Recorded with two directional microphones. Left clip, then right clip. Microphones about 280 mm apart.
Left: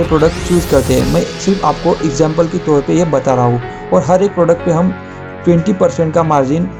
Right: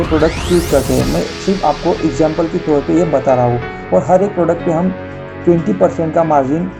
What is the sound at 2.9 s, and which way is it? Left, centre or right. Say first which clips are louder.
Speech: even; left.